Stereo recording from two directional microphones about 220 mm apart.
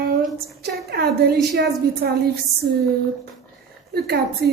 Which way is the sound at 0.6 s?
45° right (ahead or behind).